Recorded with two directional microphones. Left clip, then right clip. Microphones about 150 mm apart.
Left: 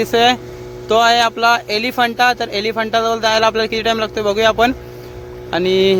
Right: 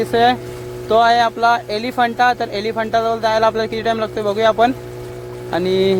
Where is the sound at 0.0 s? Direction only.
10° left (ahead or behind).